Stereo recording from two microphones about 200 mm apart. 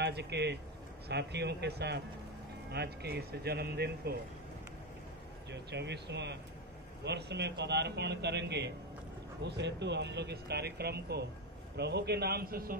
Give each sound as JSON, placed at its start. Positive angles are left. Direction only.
{"t": 0.0, "sound": "speech", "side_deg": -60}
{"t": 5.5, "sound": "speech", "side_deg": -60}